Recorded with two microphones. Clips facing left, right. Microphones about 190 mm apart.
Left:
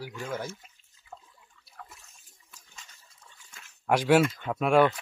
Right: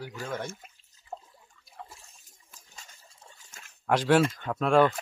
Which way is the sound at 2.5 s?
40° right (ahead or behind).